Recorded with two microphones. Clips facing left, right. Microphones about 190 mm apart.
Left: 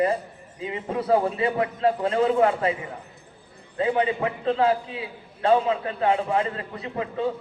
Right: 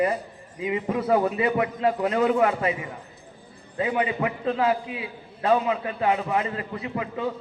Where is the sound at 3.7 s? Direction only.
30° left (ahead or behind).